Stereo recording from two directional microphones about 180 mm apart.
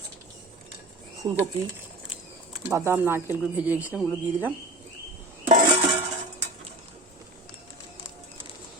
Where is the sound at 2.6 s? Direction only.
15° right (ahead or behind).